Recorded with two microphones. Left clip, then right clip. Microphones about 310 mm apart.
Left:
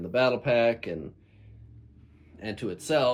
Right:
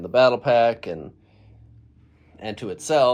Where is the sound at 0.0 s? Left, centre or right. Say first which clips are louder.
Right 7 dB; centre.